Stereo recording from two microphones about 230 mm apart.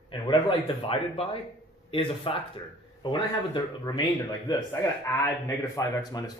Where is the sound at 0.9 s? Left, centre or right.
Left.